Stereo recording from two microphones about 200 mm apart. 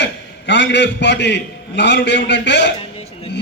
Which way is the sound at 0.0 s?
65° left (ahead or behind).